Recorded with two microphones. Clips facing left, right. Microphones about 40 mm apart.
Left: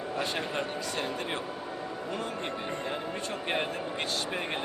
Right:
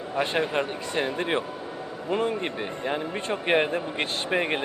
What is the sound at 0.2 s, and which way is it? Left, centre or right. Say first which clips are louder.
A man's voice: right 8 dB; right.